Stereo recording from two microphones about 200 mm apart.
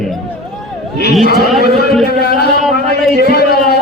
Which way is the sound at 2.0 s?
55° left (ahead or behind).